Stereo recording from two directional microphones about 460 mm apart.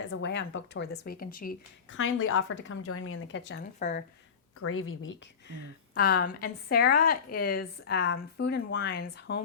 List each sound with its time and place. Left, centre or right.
0.1 s speech: left
4.6 s speech: left